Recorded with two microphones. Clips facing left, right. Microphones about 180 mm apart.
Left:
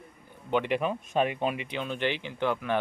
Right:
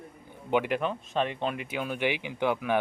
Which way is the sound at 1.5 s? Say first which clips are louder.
Right 1 dB; 5° right (ahead or behind).